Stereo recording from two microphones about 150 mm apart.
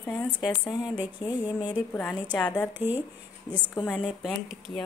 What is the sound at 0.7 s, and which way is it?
Speech, 30° left (ahead or behind).